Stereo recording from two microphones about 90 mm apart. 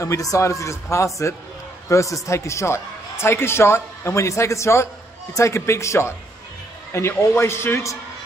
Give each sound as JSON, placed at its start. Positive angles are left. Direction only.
{"t": 0.0, "sound": "a man's voice", "side_deg": 35}